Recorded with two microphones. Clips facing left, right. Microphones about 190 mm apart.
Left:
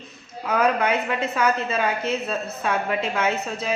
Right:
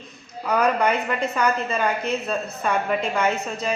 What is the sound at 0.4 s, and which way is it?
A woman's voice, 5° left (ahead or behind).